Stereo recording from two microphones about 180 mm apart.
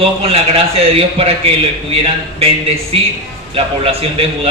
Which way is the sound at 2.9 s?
30° right (ahead or behind).